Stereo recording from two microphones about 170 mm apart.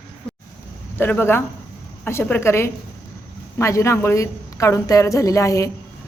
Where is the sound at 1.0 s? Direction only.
10° left (ahead or behind).